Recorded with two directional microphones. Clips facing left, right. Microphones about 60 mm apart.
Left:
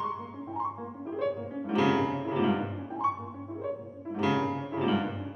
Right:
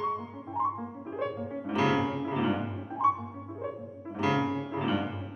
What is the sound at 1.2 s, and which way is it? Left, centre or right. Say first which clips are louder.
Music: left 3 dB; centre.